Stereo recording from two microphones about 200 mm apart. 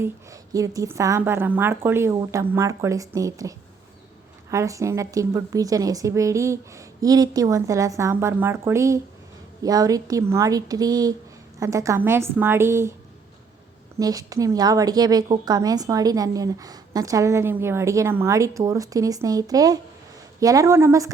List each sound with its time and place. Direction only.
0.0 s a woman's voice: 15° right (ahead or behind)
4.5 s a woman's voice: 15° right (ahead or behind)
14.0 s a woman's voice: 15° right (ahead or behind)